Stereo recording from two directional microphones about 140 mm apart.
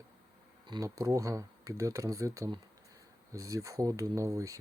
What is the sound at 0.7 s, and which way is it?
Speech, 25° right (ahead or behind).